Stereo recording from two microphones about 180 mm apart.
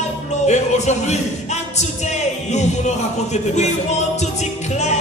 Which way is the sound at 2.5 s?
40° left (ahead or behind).